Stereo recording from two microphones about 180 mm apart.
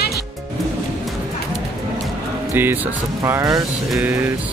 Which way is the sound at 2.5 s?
10° right (ahead or behind).